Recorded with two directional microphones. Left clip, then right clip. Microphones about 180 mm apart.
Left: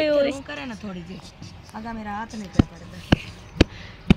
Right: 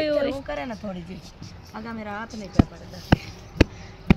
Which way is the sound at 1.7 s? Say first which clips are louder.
Left 2 dB; 40° left (ahead or behind).